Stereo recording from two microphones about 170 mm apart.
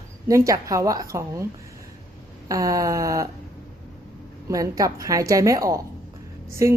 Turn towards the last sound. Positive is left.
turn(degrees=-20)  # may be behind; listen again after turning